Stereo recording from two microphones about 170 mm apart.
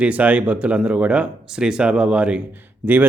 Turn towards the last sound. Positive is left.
turn(degrees=-10)  # may be behind; listen again after turning